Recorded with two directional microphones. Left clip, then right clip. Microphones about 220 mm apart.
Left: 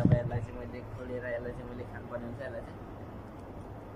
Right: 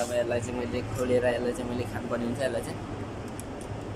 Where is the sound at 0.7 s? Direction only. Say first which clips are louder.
Right 16 dB; 20° right (ahead or behind).